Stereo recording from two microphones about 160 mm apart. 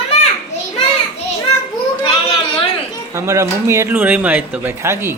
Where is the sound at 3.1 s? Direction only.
15° right (ahead or behind).